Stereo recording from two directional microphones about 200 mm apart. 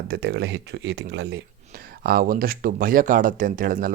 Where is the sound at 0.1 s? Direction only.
55° right (ahead or behind).